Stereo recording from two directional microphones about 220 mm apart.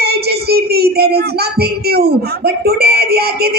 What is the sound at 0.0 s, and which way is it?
Speech, 45° right (ahead or behind).